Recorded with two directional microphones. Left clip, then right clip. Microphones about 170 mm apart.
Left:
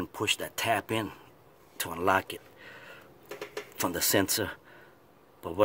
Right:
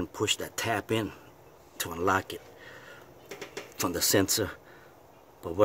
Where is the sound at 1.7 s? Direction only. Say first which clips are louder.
Left 1 dB; 15° left (ahead or behind).